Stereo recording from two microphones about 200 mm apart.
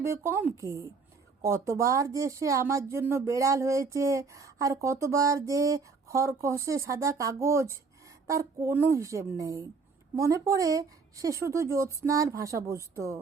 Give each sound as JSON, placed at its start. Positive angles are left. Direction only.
{"t": 0.0, "sound": "speech", "side_deg": -15}